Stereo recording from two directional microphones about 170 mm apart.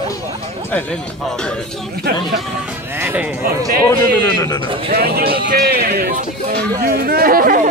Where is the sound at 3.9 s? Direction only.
20° left (ahead or behind).